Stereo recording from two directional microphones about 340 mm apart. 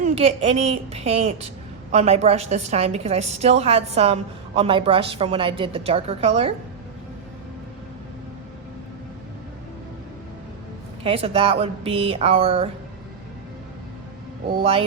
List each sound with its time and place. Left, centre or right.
0.0 s a woman's voice: centre
11.0 s a woman's voice: centre
14.5 s a woman's voice: centre